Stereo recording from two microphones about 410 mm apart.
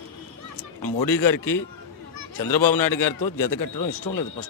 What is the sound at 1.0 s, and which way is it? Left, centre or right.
A man's voice, left.